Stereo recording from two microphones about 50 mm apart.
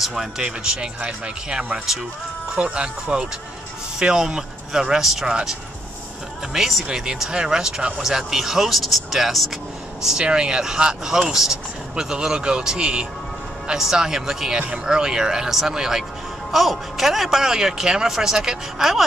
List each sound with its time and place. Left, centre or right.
0.0 s speech: centre
0.4 s speech: centre
6.5 s speech: centre
10.0 s speech: centre